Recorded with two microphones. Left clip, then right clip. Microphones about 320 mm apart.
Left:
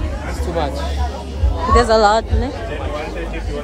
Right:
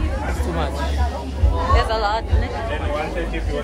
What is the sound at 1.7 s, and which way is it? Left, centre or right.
Speech, centre.